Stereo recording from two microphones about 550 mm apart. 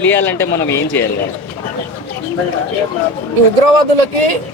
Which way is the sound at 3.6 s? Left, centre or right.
Right.